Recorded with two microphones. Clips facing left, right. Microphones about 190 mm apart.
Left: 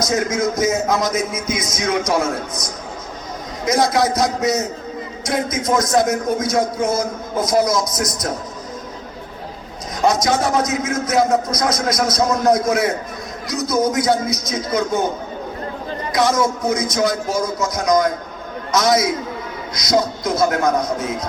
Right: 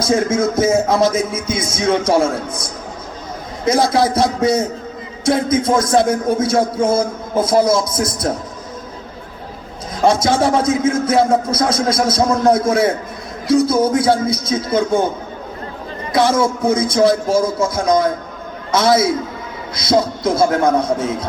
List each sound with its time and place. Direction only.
0.0 s a man's voice: 30° right (ahead or behind)
3.7 s a man's voice: 30° right (ahead or behind)
10.1 s a man's voice: 30° right (ahead or behind)
16.1 s a man's voice: 30° right (ahead or behind)